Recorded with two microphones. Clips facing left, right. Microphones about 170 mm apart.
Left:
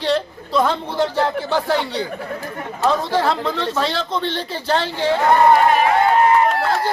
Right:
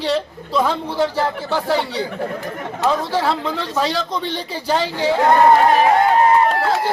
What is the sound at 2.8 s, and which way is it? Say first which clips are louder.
A man's voice: left 1 dB; 10° right (ahead or behind).